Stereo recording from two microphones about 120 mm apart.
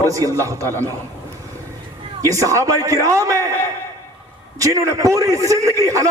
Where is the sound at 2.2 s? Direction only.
30° right (ahead or behind).